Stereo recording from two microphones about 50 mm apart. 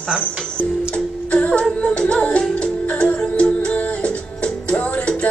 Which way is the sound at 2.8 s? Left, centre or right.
Left.